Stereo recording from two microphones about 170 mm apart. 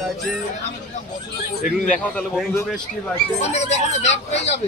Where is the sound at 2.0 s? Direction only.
5° left (ahead or behind).